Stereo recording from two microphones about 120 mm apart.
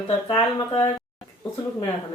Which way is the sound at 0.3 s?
40° left (ahead or behind).